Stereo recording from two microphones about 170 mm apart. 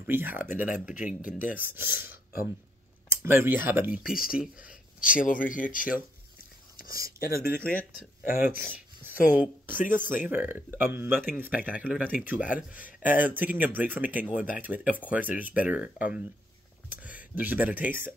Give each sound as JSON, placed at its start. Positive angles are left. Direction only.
{"t": 0.0, "sound": "speech", "side_deg": -10}
{"t": 1.9, "sound": "speech", "side_deg": 60}
{"t": 3.2, "sound": "speech", "side_deg": -10}
{"t": 5.1, "sound": "speech", "side_deg": 50}
{"t": 6.9, "sound": "speech", "side_deg": -20}
{"t": 7.2, "sound": "speech", "side_deg": 60}
{"t": 9.3, "sound": "speech", "side_deg": -10}
{"t": 9.8, "sound": "speech", "side_deg": 50}
{"t": 10.2, "sound": "speech", "side_deg": -10}
{"t": 12.4, "sound": "speech", "side_deg": 55}
{"t": 13.0, "sound": "speech", "side_deg": -10}